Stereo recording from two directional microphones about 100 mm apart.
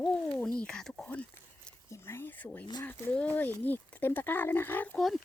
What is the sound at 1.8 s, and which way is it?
Speech, 25° left (ahead or behind).